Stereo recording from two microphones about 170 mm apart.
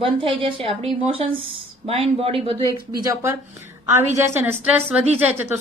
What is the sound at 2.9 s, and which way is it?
A woman's voice, 20° right (ahead or behind).